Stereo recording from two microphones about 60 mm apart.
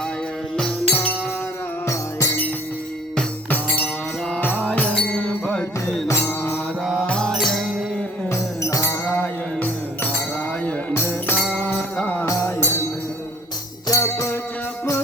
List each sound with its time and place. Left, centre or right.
0.5 s music: centre
1.9 s music: left
4.4 s music: left
5.5 s music: centre
6.1 s mantra: left
7.1 s music: centre
9.6 s music: left
10.9 s music: left
12.2 s music: left
12.5 s music: left
13.8 s music: left